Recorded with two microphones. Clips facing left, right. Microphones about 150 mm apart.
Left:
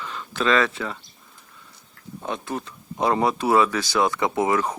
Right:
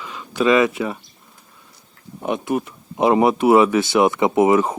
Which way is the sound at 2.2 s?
15° right (ahead or behind).